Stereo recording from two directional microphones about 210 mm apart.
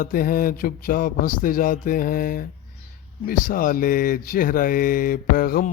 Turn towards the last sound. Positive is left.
turn(degrees=45)  # may be behind; listen again after turning